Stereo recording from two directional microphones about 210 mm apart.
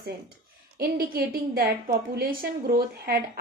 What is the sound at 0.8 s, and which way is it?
A woman's voice, 45° right (ahead or behind).